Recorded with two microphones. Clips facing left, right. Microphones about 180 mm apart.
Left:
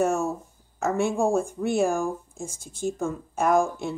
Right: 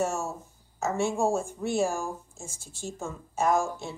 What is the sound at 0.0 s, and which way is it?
A woman's voice, 55° left (ahead or behind).